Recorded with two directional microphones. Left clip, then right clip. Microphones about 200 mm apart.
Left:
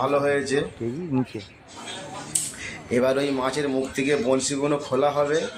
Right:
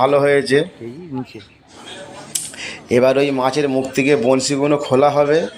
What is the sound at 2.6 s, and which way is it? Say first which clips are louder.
A man's voice: right 9 dB; 20° right (ahead or behind).